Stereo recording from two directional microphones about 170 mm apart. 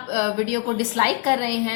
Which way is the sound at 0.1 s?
45° right (ahead or behind).